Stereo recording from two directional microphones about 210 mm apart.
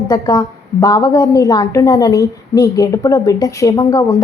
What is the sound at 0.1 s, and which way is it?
A woman's voice, 15° left (ahead or behind).